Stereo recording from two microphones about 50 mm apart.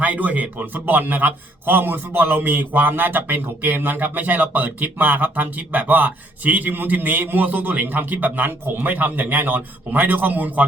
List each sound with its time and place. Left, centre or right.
0.0 s a man's voice: right